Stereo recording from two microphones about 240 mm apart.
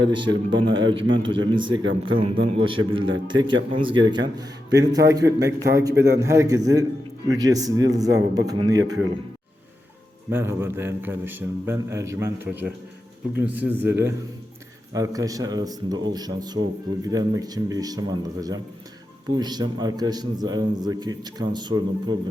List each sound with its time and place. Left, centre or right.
0.0 s a man's voice: centre
1.8 s speech: right
2.1 s a man's voice: right
10.2 s a man's voice: centre
14.9 s a man's voice: centre